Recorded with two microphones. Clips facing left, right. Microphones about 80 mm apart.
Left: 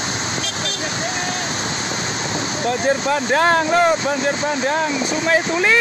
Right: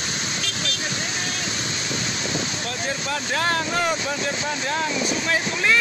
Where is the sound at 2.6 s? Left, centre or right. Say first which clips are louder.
Left 10 dB; left.